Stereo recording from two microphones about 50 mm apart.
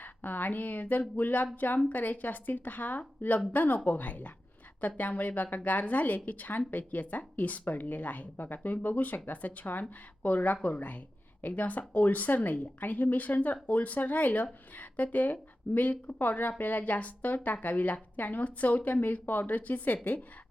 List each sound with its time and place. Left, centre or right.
0.0 s speech: left